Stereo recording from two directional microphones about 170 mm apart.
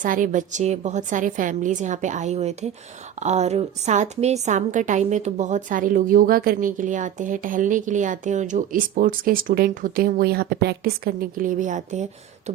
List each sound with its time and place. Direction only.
0.0 s a woman's voice: 50° right (ahead or behind)